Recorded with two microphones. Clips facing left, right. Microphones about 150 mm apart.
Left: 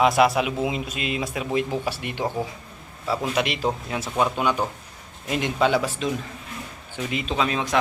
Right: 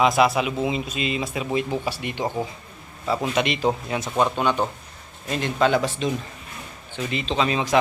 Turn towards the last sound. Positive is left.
turn(degrees=0)  # may be behind; listen again after turning